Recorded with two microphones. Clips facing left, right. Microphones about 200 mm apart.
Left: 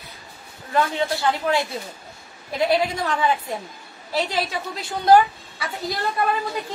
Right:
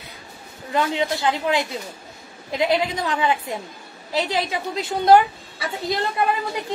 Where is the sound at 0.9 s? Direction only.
15° right (ahead or behind).